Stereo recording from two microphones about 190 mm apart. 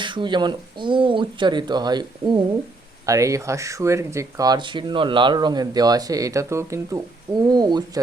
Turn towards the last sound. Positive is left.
turn(degrees=-20)  # may be behind; listen again after turning